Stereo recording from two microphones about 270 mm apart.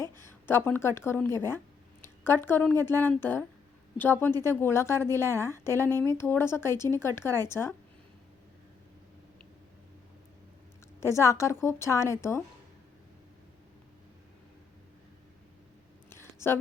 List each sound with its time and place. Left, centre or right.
0.0 s a woman's voice: centre
11.0 s a woman's voice: centre
16.0 s a sound: centre